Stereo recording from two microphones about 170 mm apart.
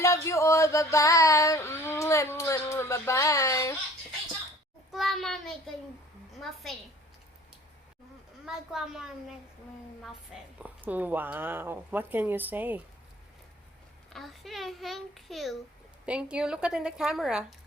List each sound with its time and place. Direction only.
0.0 s music: 15° left (ahead or behind)
4.9 s a sound: centre (ahead or behind)
6.4 s a child's voice: centre (ahead or behind)
8.4 s a child's voice: 5° right (ahead or behind)
14.1 s a child's voice: centre (ahead or behind)